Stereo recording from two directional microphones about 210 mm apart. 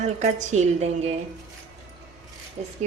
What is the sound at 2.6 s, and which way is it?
Speech, 30° right (ahead or behind).